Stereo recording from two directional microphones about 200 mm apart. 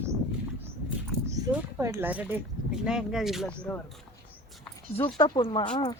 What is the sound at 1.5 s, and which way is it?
Speech, 15° right (ahead or behind).